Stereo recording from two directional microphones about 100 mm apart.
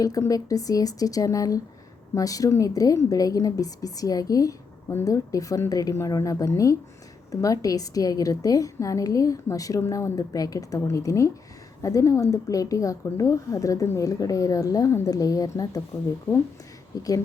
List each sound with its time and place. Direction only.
0.0 s a woman's voice: 35° left (ahead or behind)
16.9 s a woman's voice: 35° left (ahead or behind)